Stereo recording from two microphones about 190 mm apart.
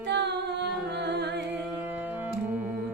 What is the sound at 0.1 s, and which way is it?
A capella, 65° right (ahead or behind).